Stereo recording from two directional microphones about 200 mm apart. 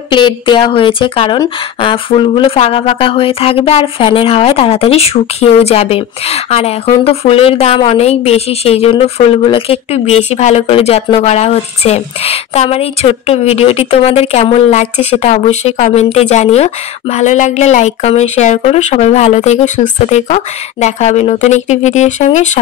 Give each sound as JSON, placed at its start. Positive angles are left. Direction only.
{"t": 0.1, "sound": "a woman's voice", "side_deg": 25}